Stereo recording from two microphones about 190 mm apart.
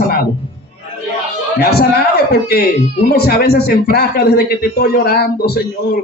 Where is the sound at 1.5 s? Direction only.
55° left (ahead or behind).